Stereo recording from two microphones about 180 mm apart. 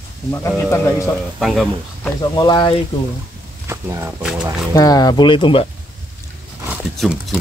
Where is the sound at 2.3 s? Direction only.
25° left (ahead or behind).